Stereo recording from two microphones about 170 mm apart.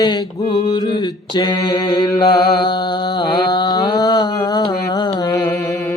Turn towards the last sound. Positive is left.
turn(degrees=20)  # may be behind; listen again after turning